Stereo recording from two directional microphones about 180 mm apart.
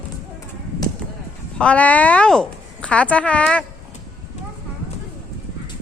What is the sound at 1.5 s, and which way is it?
A woman's voice, 5° left (ahead or behind).